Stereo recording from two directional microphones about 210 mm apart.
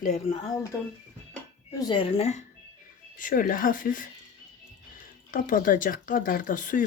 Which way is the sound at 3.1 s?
40° left (ahead or behind).